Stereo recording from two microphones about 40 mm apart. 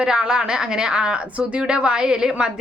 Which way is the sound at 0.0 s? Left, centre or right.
Right.